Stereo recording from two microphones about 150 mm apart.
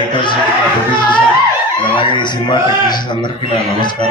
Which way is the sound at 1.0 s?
30° left (ahead or behind).